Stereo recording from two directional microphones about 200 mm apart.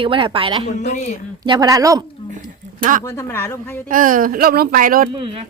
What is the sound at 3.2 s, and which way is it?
Speech, 10° left (ahead or behind).